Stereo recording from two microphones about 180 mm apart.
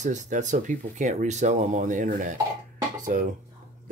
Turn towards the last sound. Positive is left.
turn(degrees=-45)  # may be behind; listen again after turning